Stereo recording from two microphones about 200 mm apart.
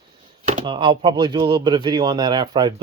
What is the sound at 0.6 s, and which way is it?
Speech, 25° right (ahead or behind).